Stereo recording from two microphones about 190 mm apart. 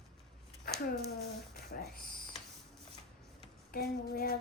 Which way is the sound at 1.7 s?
55° left (ahead or behind).